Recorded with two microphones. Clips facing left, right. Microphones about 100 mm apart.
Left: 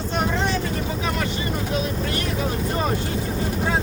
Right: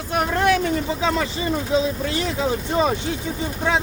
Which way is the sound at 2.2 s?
90° right.